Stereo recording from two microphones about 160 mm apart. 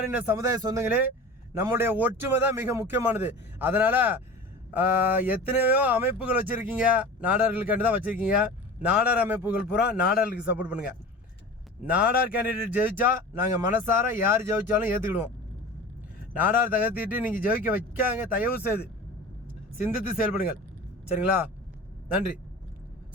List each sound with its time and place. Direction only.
0.1 s a man's voice: 15° right (ahead or behind)
0.9 s speech: 10° right (ahead or behind)
16.3 s speech: 10° right (ahead or behind)